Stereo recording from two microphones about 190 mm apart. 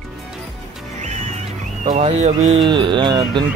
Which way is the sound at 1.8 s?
35° right (ahead or behind).